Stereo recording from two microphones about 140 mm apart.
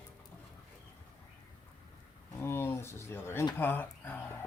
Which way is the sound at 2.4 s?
15° left (ahead or behind).